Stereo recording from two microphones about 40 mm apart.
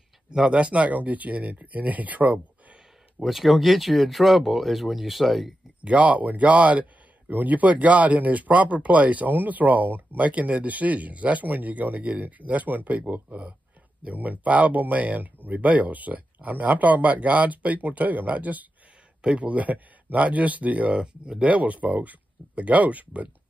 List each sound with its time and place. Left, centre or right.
0.3 s speech: right
3.2 s speech: centre
5.8 s speech: right
7.2 s speech: right
21.0 s speech: right
21.5 s speech: right